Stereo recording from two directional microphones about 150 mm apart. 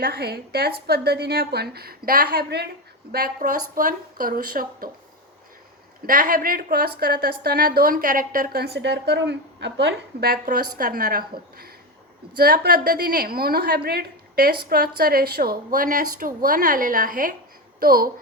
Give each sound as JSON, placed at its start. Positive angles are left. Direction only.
{"t": 0.0, "sound": "a woman's voice", "side_deg": -90}
{"t": 6.1, "sound": "a woman's voice", "side_deg": -70}
{"t": 10.2, "sound": "a woman's voice", "side_deg": -80}